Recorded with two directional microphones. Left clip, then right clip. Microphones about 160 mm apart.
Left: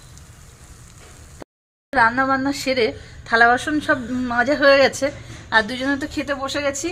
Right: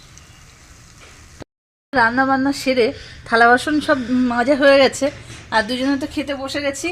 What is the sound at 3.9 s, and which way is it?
A woman's voice, 70° right (ahead or behind).